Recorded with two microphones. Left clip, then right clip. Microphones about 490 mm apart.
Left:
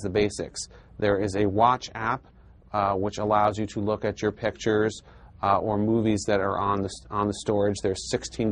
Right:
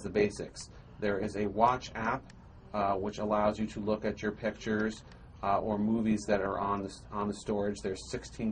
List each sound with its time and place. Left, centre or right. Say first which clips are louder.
0.0 s speech: left 5 dB; left